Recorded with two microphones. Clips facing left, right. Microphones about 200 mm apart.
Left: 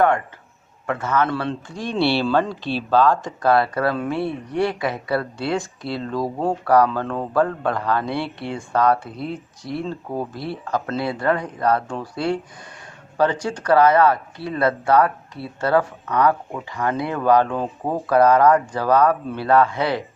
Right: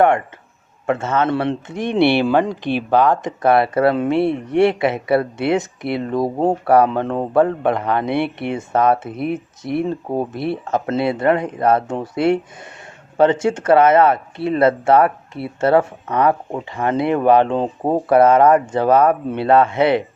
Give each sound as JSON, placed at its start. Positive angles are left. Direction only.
{"t": 0.9, "sound": "speech", "side_deg": -25}